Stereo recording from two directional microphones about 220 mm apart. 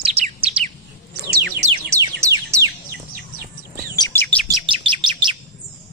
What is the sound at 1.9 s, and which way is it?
Bird, 15° right (ahead or behind).